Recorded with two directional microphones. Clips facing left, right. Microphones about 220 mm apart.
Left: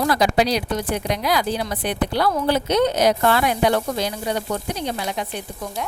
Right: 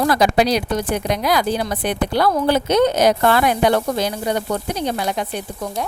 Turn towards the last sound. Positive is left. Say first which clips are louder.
# right 4 dB
turn(degrees=-50)  # may be behind; listen again after turning